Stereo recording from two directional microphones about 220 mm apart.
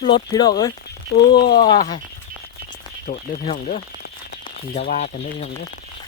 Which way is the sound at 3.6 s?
45° left (ahead or behind).